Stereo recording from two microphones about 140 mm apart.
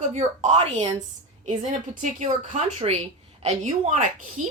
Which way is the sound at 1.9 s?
65° right (ahead or behind).